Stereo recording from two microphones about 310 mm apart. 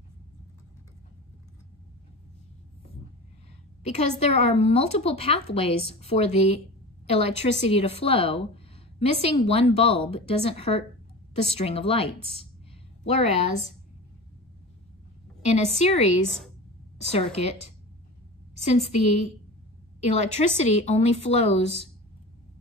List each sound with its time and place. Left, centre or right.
3.8 s a woman's voice: left
13.1 s a woman's voice: centre
15.4 s a woman's voice: left
17.1 s a woman's voice: centre